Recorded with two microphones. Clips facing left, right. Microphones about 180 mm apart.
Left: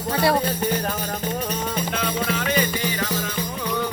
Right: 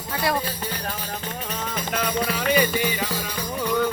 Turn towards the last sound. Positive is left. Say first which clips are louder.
# right 2 dB
turn(degrees=-15)  # may be behind; listen again after turning